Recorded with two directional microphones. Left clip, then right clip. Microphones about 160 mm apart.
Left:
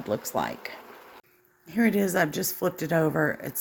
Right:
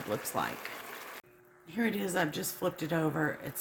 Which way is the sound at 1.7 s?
50° left (ahead or behind).